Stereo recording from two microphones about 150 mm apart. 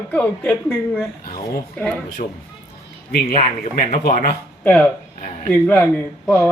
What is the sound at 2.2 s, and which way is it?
Speech, 55° left (ahead or behind).